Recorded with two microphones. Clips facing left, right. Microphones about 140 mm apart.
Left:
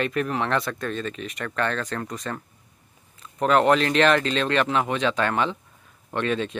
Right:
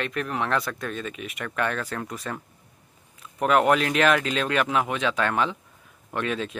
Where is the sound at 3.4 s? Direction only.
5° right (ahead or behind).